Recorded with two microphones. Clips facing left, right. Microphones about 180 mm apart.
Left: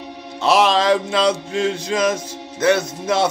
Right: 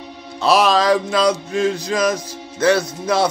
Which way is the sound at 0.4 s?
20° left (ahead or behind).